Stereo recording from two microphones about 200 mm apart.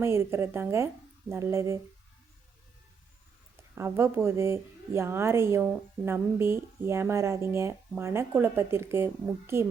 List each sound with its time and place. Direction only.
0.0 s a woman's voice: 10° right (ahead or behind)
3.8 s a woman's voice: 15° right (ahead or behind)